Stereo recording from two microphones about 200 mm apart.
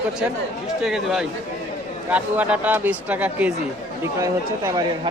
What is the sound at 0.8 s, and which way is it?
A man's voice, centre (ahead or behind).